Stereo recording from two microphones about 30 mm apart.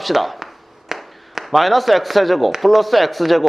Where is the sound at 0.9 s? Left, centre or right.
Centre.